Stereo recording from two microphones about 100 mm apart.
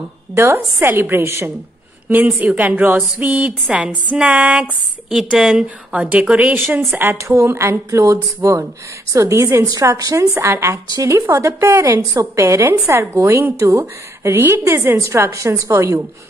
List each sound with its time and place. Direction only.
0.7 s a woman's voice: 20° right (ahead or behind)